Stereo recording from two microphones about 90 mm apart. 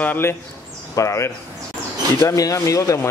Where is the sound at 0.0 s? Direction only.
25° left (ahead or behind).